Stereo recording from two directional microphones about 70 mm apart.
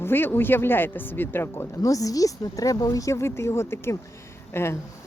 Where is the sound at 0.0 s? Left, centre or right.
Left.